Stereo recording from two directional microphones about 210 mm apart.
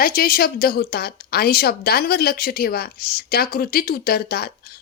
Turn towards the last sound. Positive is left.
turn(degrees=45)  # may be behind; listen again after turning